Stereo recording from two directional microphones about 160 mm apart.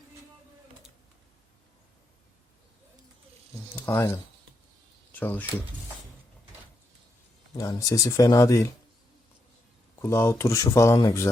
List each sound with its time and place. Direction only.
3.8 s speech: 15° left (ahead or behind)
7.5 s speech: 20° left (ahead or behind)
9.9 s speech: 15° left (ahead or behind)